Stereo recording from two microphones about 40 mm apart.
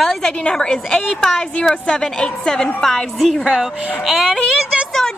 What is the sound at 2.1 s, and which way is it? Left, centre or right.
Speech, left.